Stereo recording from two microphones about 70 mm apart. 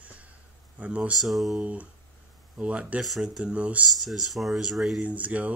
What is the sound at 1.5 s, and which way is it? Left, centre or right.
Speech, centre.